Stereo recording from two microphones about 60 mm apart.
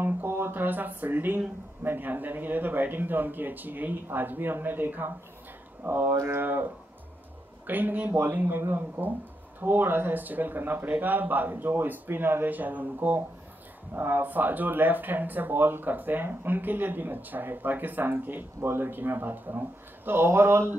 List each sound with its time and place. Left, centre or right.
0.0 s speech: right
20.1 s speech: right